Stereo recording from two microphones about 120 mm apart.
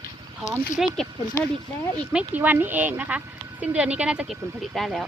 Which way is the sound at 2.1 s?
15° right (ahead or behind).